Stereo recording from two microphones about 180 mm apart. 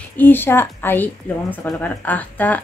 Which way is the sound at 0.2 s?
10° left (ahead or behind).